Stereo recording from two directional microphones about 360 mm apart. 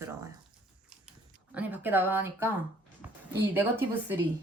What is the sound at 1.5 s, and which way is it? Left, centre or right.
Speech, centre.